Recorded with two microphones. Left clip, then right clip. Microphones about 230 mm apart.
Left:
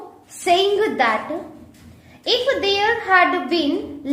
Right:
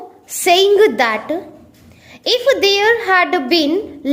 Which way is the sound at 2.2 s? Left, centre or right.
Right.